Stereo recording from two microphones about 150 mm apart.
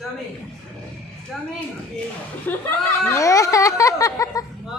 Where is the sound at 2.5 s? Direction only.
10° left (ahead or behind).